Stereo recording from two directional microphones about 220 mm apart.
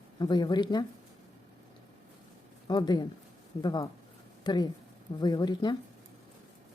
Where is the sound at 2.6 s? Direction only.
20° left (ahead or behind).